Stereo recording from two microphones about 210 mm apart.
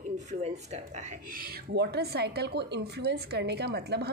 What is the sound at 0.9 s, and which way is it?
A woman's voice, 40° right (ahead or behind).